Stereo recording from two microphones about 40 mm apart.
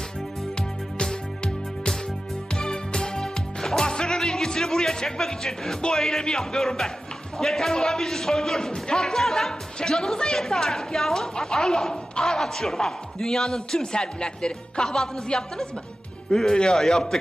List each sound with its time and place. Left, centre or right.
0.5 s music: left
2.5 s music: left
5.8 s a woman's voice: centre